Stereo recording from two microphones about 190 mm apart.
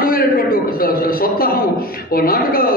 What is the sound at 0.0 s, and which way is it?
A man's voice, 50° left (ahead or behind).